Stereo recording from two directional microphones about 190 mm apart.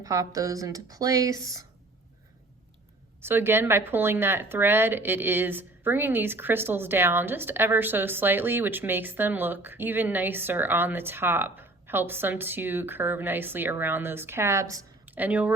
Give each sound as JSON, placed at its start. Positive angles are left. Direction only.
{"t": 0.0, "sound": "speech", "side_deg": -15}
{"t": 3.2, "sound": "speech", "side_deg": -10}